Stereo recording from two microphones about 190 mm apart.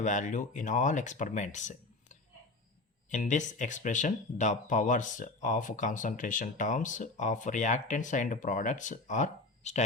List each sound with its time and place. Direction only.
0.0 s speech: 40° left (ahead or behind)